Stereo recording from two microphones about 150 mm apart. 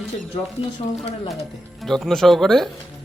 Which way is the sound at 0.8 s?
40° left (ahead or behind).